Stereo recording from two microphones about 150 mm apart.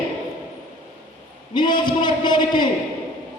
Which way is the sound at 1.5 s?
30° left (ahead or behind).